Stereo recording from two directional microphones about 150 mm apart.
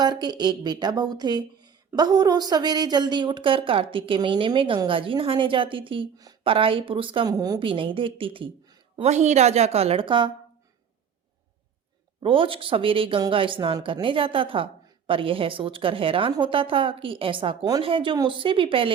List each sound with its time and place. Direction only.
0.0 s speech: 30° right (ahead or behind)
9.0 s a woman's voice: 50° right (ahead or behind); by 10.3 s 35° right (ahead or behind)
12.2 s speech: 35° right (ahead or behind)